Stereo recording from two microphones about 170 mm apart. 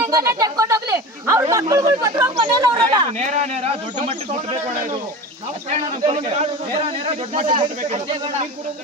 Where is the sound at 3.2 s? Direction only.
40° right (ahead or behind).